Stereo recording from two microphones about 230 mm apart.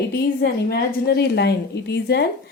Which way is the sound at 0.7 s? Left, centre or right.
Left.